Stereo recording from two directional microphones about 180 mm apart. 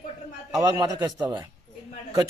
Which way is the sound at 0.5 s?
20° right (ahead or behind).